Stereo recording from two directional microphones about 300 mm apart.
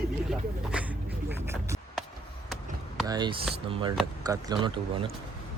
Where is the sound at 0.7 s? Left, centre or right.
Centre.